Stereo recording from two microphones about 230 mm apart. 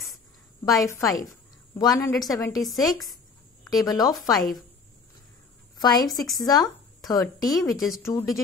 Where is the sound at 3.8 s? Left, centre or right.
Centre.